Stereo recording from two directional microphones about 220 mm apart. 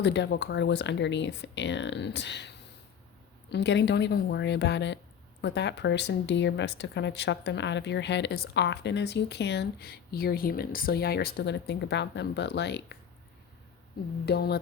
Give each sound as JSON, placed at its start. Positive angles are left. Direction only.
{"t": 0.0, "sound": "speech", "side_deg": 50}
{"t": 3.5, "sound": "speech", "side_deg": 50}
{"t": 14.3, "sound": "speech", "side_deg": 45}